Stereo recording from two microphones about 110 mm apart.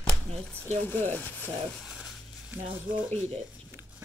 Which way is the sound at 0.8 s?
15° left (ahead or behind).